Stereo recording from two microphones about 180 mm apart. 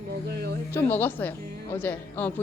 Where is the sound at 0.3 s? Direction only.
65° right (ahead or behind).